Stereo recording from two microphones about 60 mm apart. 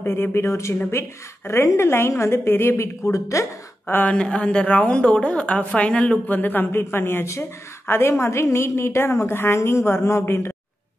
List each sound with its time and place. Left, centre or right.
0.0 s a woman's voice: left
3.0 s a woman's voice: left
3.8 s speech: left
4.1 s a woman's voice: centre
6.2 s a woman's voice: left